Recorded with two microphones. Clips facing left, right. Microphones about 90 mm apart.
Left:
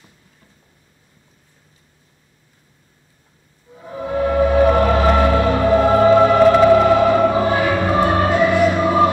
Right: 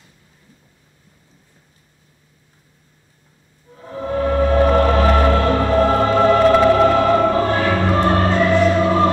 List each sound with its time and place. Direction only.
3.8 s music: 10° left (ahead or behind)